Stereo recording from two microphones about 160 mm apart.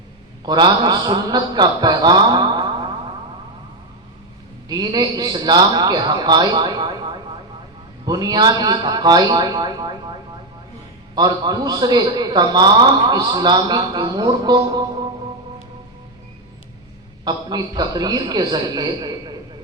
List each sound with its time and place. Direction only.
0.4 s a man's voice: 25° right (ahead or behind)
4.7 s a man's voice: 25° right (ahead or behind)
17.2 s a man's voice: 25° right (ahead or behind)